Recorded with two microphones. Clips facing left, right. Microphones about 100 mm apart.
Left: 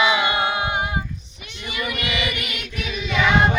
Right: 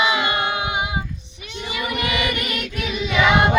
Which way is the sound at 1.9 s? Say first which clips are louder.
Right 6 dB; 40° right (ahead or behind).